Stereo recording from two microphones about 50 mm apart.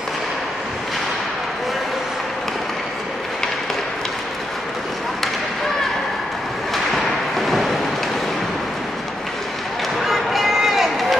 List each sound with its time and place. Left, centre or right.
6.7 s thump: centre
10.0 s run: centre